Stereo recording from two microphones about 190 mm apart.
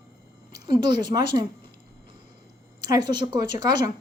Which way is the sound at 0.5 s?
25° right (ahead or behind).